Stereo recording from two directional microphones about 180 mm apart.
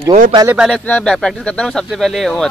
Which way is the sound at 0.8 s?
5° left (ahead or behind).